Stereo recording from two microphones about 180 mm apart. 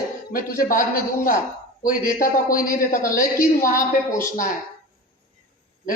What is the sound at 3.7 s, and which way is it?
Speech, 15° left (ahead or behind).